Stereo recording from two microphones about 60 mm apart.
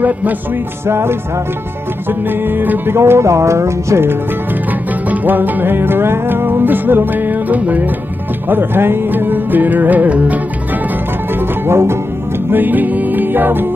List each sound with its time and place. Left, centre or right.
0.8 s music: right
2.5 s music: right
3.0 s music: right
5.1 s music: right
8.5 s music: right
11.6 s music: right
12.4 s music: right